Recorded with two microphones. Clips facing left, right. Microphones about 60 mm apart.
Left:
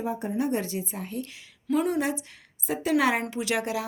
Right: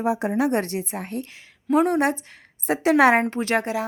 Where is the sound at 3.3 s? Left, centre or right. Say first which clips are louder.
Right 5 dB; right.